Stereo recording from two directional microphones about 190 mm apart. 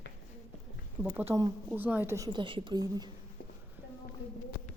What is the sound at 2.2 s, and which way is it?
Speech, 25° right (ahead or behind).